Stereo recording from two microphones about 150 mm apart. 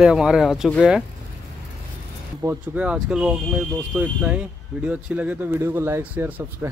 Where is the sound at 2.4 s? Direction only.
10° right (ahead or behind).